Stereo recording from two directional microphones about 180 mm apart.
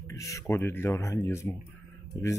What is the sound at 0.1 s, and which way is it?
Speech, 20° left (ahead or behind).